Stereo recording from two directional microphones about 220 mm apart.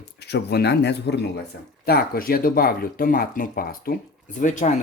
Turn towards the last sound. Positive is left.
turn(degrees=35)  # may be behind; listen again after turning